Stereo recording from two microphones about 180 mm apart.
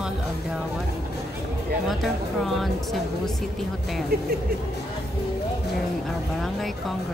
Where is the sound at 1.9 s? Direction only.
Centre (ahead or behind).